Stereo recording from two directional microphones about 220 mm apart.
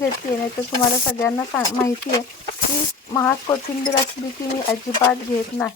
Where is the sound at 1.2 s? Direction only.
10° left (ahead or behind).